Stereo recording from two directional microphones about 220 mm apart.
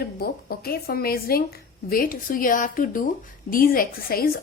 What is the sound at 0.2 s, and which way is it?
A woman's voice, 45° left (ahead or behind).